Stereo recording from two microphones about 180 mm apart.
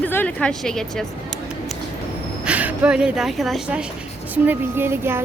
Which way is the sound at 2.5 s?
10° right (ahead or behind).